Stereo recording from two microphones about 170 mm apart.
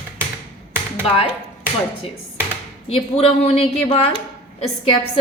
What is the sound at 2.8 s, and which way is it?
A woman's voice, 35° left (ahead or behind).